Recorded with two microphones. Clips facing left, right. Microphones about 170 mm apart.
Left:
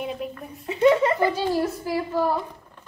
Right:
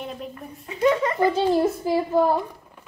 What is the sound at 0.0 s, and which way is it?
Speech, 5° left (ahead or behind).